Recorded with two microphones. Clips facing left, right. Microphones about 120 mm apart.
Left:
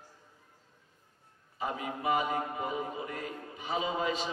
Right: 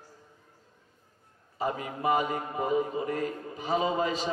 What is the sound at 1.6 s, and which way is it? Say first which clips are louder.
A man's voice: right 4 dB; 40° right (ahead or behind).